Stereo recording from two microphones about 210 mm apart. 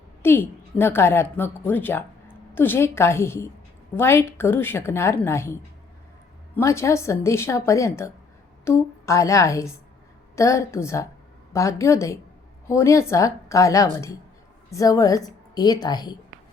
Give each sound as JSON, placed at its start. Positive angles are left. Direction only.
{"t": 0.2, "sound": "a woman's voice", "side_deg": 10}
{"t": 6.6, "sound": "a woman's voice", "side_deg": 15}